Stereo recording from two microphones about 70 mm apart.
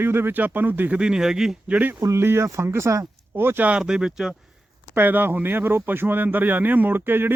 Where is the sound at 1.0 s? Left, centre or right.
Centre.